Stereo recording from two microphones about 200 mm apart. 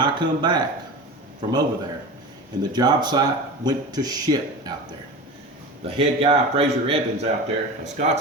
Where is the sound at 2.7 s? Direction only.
20° right (ahead or behind).